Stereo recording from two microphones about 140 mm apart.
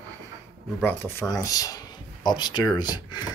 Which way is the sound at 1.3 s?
25° left (ahead or behind).